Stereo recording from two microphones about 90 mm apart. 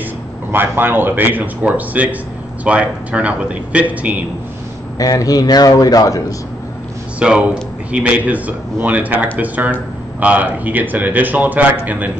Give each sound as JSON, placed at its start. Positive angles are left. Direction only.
{"t": 0.5, "sound": "a man's voice", "side_deg": -25}
{"t": 4.9, "sound": "a man's voice", "side_deg": 40}
{"t": 7.2, "sound": "a man's voice", "side_deg": -15}